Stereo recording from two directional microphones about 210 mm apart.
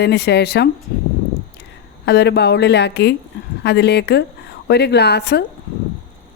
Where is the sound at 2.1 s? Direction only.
50° left (ahead or behind).